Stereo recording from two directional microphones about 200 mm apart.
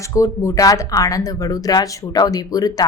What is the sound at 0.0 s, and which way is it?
A woman's voice, 15° left (ahead or behind).